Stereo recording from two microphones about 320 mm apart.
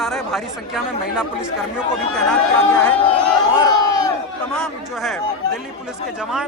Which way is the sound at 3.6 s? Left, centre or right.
Centre.